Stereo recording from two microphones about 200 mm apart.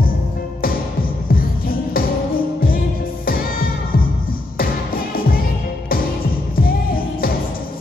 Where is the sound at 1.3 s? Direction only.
45° left (ahead or behind).